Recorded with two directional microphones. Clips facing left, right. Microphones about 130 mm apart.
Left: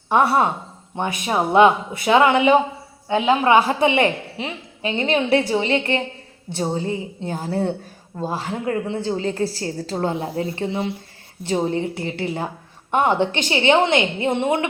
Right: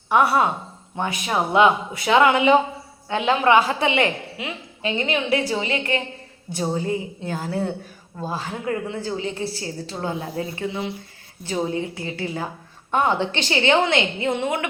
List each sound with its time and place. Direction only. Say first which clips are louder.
0.1 s a man's voice: left 1 dB; 20° left (ahead or behind)